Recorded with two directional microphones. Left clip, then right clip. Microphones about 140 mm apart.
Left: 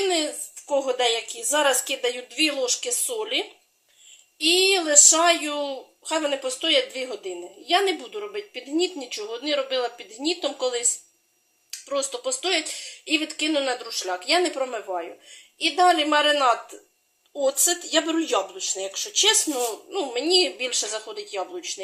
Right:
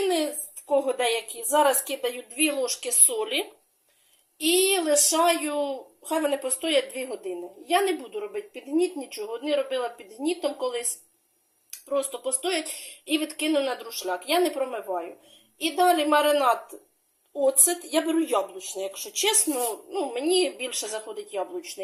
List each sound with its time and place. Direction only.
0.0 s a sound: 5° right (ahead or behind)
0.7 s a woman's voice: 5° right (ahead or behind)
11.9 s a woman's voice: centre (ahead or behind)